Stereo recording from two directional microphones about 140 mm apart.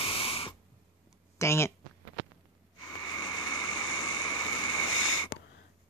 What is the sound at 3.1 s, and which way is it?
Vehicle, 30° left (ahead or behind).